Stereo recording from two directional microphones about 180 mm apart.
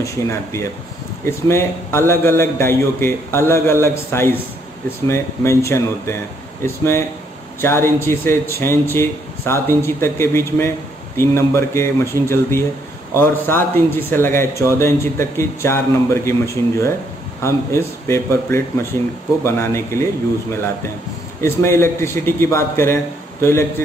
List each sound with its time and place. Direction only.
0.0 s a man's voice: 15° left (ahead or behind)
21.4 s a man's voice: 15° left (ahead or behind)